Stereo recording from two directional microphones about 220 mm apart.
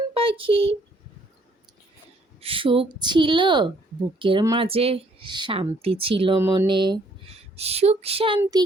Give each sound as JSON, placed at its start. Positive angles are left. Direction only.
{"t": 0.1, "sound": "a child's voice", "side_deg": -25}
{"t": 2.4, "sound": "speech", "side_deg": -25}
{"t": 6.4, "sound": "speech", "side_deg": -10}